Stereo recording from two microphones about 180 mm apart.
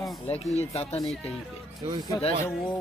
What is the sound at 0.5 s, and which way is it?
Speech, 35° left (ahead or behind).